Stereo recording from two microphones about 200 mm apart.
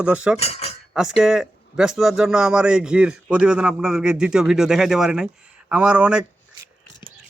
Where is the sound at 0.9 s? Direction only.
5° right (ahead or behind).